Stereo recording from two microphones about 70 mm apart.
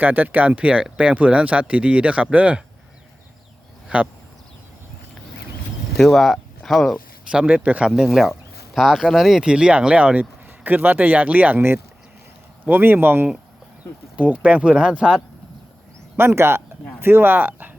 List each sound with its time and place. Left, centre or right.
0.0 s speech: right
3.8 s speech: centre
6.0 s speech: centre
7.3 s speech: centre
12.6 s speech: right
16.1 s speech: right